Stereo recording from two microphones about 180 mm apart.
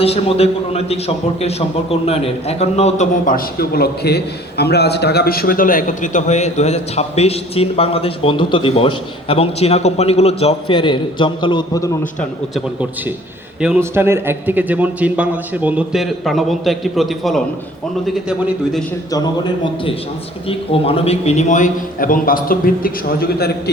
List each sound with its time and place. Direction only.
0.0 s a man's voice: 35° left (ahead or behind)
13.7 s a man's voice: 15° right (ahead or behind)
20.5 s a man's voice: 30° left (ahead or behind); by 23.5 s 55° left (ahead or behind)